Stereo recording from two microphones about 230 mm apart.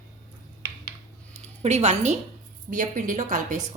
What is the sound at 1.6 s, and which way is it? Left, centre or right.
A woman's voice, right.